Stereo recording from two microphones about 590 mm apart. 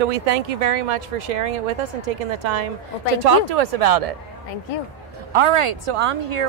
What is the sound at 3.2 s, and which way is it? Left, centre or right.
Speech, right.